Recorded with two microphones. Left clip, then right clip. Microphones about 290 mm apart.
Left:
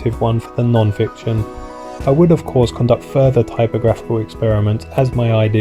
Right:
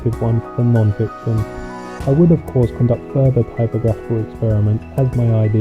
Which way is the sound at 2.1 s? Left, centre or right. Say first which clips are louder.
Left 3 dB; left.